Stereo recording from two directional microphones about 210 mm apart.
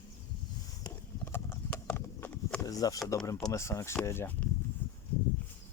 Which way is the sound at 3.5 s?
15° left (ahead or behind).